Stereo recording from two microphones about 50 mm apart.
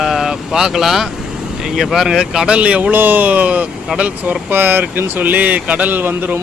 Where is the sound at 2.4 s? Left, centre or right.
Right.